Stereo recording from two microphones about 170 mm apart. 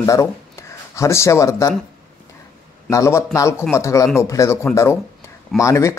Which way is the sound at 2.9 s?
20° left (ahead or behind).